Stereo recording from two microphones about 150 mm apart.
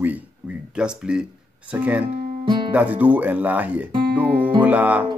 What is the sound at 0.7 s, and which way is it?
Speech, 5° right (ahead or behind).